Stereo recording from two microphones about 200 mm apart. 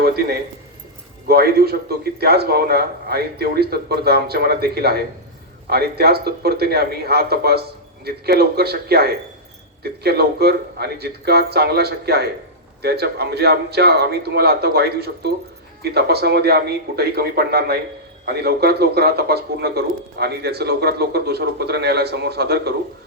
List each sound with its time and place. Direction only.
0.0 s a man's voice: 50° right (ahead or behind)